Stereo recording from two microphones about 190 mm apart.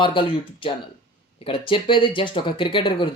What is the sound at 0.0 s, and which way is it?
Speech, 25° left (ahead or behind).